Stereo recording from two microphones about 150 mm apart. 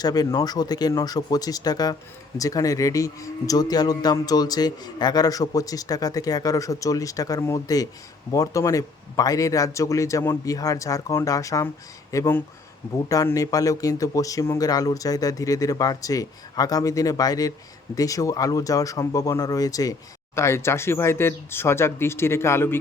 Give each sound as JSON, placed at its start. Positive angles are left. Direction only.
{"t": 0.0, "sound": "speech", "side_deg": 25}